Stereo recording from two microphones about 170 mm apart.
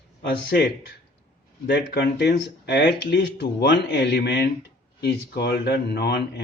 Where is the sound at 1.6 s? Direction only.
75° left (ahead or behind).